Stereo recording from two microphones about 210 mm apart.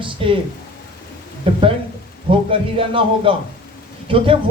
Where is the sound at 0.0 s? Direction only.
25° right (ahead or behind).